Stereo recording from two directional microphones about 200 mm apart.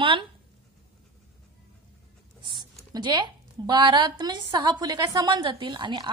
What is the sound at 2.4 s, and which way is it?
A woman's voice, 25° right (ahead or behind).